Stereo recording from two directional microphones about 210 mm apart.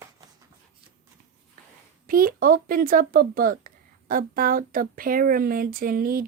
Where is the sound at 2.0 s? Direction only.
40° right (ahead or behind).